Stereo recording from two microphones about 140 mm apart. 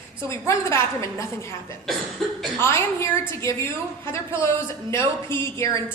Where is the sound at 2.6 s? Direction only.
20° left (ahead or behind).